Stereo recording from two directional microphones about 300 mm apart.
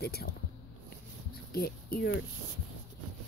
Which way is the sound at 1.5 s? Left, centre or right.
Left.